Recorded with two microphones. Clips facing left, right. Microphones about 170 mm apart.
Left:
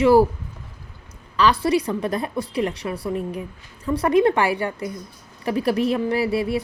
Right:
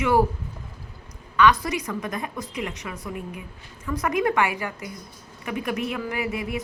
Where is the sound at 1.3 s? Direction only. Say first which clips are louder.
Left 2 dB; 30° left (ahead or behind).